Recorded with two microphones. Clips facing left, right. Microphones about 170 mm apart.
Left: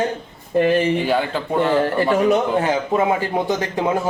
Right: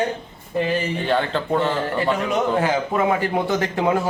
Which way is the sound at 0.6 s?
55° left (ahead or behind).